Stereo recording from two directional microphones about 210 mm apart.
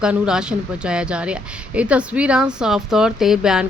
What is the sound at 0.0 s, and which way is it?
A woman's voice, 5° right (ahead or behind).